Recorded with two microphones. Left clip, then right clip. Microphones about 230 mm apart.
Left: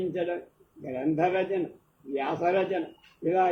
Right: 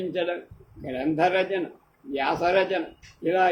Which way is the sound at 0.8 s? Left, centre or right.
Right.